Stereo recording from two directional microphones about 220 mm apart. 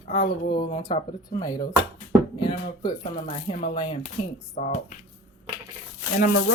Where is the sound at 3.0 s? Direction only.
30° left (ahead or behind).